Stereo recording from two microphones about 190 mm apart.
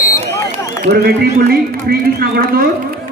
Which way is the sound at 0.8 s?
55° right (ahead or behind).